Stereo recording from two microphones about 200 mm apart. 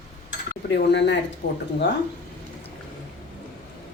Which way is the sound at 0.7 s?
60° left (ahead or behind).